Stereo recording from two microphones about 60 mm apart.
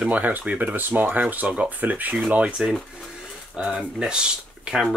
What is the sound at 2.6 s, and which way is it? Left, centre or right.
Speech, centre.